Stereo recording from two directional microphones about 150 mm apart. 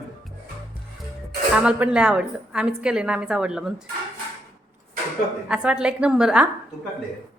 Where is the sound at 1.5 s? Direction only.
5° right (ahead or behind).